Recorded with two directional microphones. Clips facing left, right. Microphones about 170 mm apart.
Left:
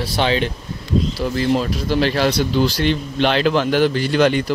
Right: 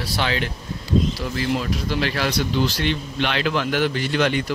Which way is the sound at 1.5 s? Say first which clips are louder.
Left 4 dB; 35° left (ahead or behind).